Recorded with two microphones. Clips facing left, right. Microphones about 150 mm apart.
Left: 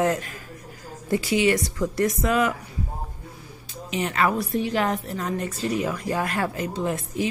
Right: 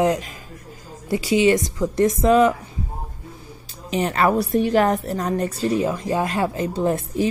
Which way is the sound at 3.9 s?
35° right (ahead or behind).